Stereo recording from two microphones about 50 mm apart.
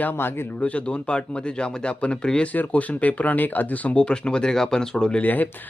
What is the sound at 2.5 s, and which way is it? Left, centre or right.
Speech, left.